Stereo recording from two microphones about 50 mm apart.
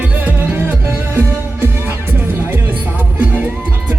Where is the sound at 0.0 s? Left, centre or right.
Right.